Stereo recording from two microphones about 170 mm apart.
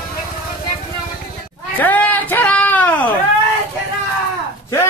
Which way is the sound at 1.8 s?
10° left (ahead or behind).